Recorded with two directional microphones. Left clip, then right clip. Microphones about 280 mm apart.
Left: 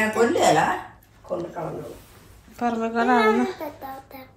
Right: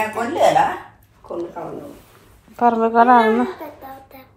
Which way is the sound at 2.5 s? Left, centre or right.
Centre.